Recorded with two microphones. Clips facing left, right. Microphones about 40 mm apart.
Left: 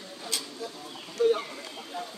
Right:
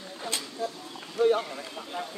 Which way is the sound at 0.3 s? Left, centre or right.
Right.